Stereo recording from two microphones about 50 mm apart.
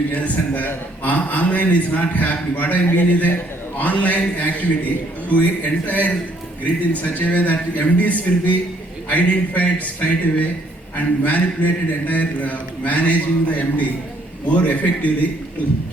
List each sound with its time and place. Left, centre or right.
0.1 s a man's voice: left